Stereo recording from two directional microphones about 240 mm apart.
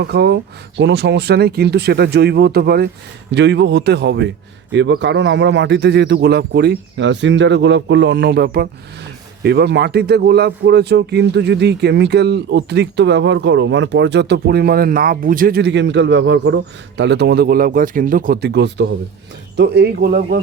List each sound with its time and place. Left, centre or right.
0.0 s speech: right